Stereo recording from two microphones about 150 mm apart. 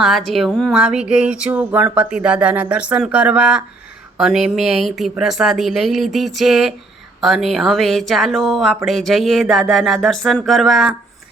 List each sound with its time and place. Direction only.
0.0 s speech: centre (ahead or behind)
0.8 s a sound: 5° right (ahead or behind)
4.2 s speech: 5° right (ahead or behind)